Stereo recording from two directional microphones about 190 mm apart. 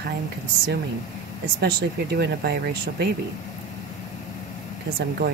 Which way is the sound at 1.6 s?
60° right (ahead or behind).